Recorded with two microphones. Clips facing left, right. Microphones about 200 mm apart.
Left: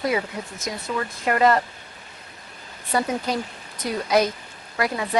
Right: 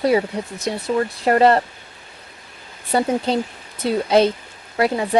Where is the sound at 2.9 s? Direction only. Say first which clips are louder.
Right 5 dB; 30° right (ahead or behind).